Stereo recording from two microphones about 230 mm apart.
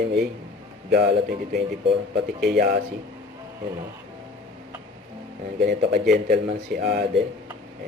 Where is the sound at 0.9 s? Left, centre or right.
Right.